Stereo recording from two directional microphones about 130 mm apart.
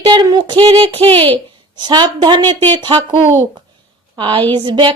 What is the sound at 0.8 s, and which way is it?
A woman's voice, 45° right (ahead or behind).